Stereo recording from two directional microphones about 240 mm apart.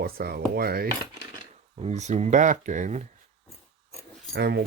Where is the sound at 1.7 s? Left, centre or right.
Right.